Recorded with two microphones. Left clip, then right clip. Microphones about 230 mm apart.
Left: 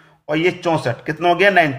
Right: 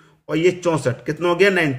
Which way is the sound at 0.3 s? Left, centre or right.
Centre.